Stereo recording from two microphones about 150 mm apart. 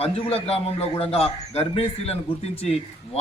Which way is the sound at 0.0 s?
40° left (ahead or behind).